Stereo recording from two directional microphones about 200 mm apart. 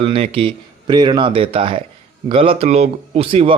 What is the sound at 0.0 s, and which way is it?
A man's voice, 30° right (ahead or behind).